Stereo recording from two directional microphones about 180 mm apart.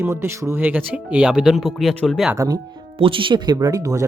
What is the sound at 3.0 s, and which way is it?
Speech, 30° right (ahead or behind).